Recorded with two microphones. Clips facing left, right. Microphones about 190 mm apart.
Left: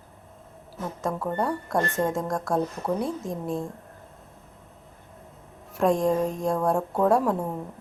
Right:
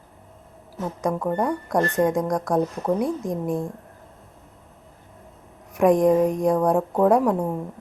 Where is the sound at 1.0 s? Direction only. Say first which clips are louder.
Right 4 dB; 15° right (ahead or behind).